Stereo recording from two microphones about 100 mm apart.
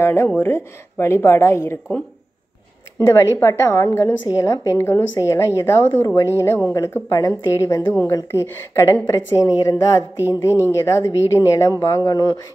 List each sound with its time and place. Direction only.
0.0 s a woman's voice: 25° left (ahead or behind)
3.1 s a woman's voice: 30° left (ahead or behind)
7.8 s a woman's voice: 20° left (ahead or behind)
8.1 s a woman's voice: 30° left (ahead or behind)